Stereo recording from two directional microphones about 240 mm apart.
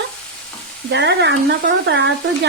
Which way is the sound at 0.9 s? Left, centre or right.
Right.